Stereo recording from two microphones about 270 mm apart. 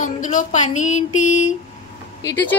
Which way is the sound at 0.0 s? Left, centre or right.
Left.